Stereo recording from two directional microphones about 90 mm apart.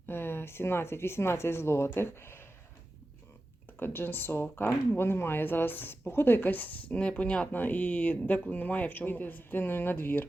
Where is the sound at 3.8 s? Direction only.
25° left (ahead or behind).